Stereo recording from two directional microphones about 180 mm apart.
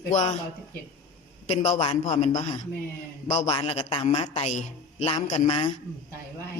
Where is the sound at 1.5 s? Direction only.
35° left (ahead or behind).